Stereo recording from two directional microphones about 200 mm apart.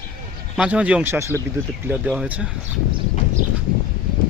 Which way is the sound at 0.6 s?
5° right (ahead or behind).